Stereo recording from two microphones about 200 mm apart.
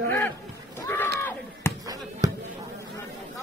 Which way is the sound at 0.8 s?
15° left (ahead or behind).